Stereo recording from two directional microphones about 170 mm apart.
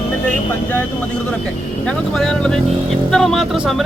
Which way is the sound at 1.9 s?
Centre (ahead or behind).